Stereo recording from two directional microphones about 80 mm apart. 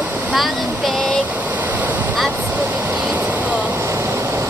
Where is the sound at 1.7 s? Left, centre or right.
Right.